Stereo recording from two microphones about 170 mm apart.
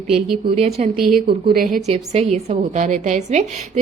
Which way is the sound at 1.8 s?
40° right (ahead or behind).